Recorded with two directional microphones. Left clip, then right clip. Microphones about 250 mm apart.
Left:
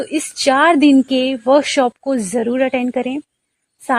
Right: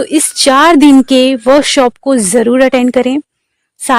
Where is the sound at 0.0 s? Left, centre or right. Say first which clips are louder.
Right 7 dB; right.